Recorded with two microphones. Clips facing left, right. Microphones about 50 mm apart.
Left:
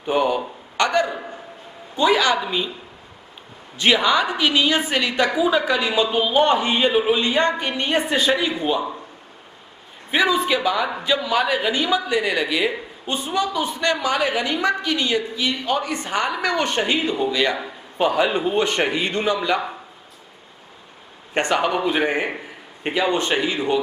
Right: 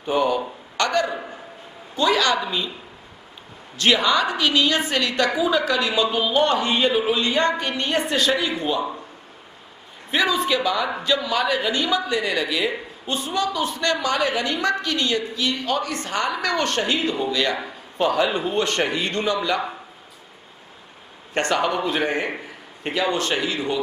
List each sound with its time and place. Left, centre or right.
0.0 s a woman's voice: centre
0.7 s a sound: centre
1.0 s a man's voice: centre
2.0 s a woman's voice: centre
3.7 s a woman's voice: centre
10.1 s a woman's voice: centre
21.3 s a woman's voice: centre